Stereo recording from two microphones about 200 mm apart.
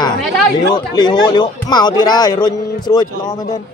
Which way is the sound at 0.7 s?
20° left (ahead or behind).